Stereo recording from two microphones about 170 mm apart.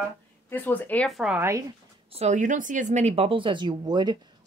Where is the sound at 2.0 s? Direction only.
40° right (ahead or behind).